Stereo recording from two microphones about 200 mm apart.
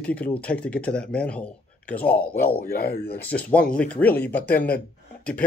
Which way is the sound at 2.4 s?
45° left (ahead or behind).